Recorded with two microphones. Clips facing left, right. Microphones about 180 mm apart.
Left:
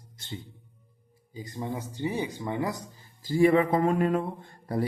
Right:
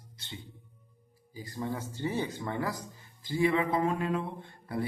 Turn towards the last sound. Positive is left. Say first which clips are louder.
# left 5 dB
turn(degrees=45)  # may be behind; listen again after turning